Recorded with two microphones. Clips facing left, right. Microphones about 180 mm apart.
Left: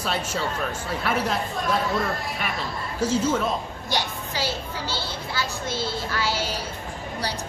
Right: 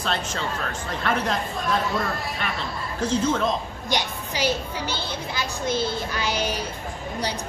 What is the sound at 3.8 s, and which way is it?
A child's voice, 20° right (ahead or behind).